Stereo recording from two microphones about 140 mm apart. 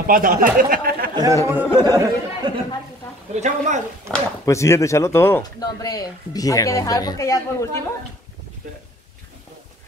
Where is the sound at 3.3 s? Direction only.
55° right (ahead or behind).